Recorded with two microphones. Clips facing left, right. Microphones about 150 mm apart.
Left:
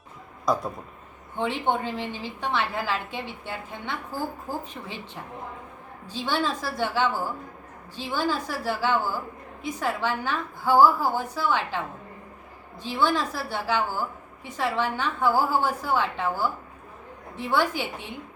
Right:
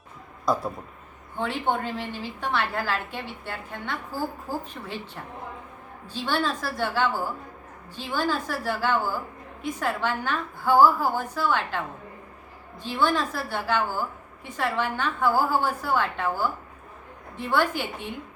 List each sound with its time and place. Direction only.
0.4 s speech: centre (ahead or behind)
1.4 s a woman's voice: 15° left (ahead or behind)
12.8 s a woman's voice: 15° left (ahead or behind)